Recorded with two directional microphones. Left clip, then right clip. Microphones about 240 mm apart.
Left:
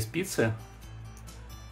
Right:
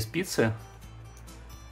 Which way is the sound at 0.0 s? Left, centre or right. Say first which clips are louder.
Right 2 dB; centre.